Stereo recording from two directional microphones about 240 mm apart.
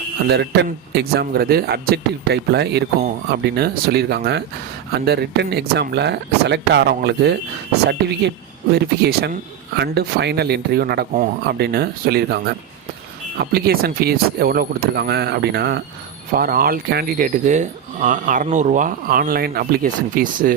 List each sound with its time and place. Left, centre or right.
0.3 s a man's voice: right